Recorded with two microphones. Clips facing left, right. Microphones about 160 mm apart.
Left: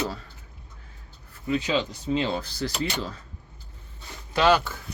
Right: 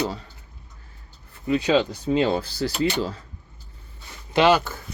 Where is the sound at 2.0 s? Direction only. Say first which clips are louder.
Right 5 dB; 40° right (ahead or behind).